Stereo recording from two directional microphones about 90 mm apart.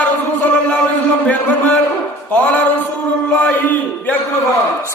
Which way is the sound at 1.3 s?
15° left (ahead or behind).